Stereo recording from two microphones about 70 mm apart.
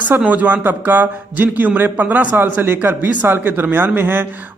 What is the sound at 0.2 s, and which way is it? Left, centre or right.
A man's voice, right.